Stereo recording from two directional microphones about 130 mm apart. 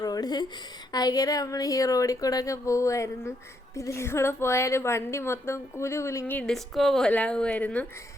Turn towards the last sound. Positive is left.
turn(degrees=10)  # may be behind; listen again after turning